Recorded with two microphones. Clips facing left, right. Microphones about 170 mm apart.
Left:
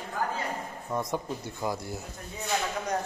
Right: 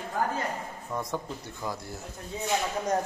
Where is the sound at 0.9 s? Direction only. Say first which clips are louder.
Left 2 dB; 15° left (ahead or behind).